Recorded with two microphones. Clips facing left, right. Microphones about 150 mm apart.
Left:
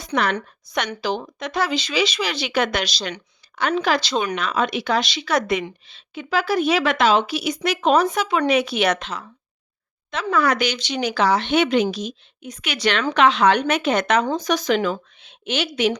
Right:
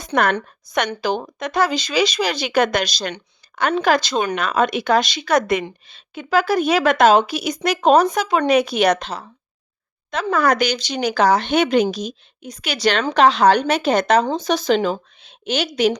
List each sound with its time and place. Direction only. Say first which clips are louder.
0.0 s a woman's voice: right 3 dB; 50° right (ahead or behind)
10.3 s a woman's voice: right 2 dB; 40° right (ahead or behind)